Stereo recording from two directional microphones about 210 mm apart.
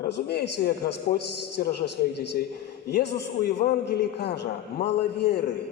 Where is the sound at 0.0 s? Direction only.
50° left (ahead or behind).